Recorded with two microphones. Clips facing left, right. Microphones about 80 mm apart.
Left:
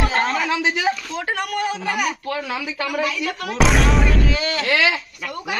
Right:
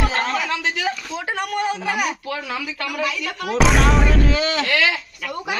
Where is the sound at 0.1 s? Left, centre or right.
Centre.